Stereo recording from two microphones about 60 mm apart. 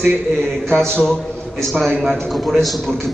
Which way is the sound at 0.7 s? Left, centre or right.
Centre.